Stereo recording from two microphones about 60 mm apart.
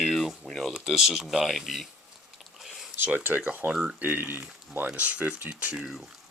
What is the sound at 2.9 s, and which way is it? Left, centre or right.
Speech, right.